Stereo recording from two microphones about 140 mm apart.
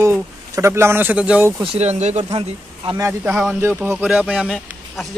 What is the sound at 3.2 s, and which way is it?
Speech, 5° right (ahead or behind).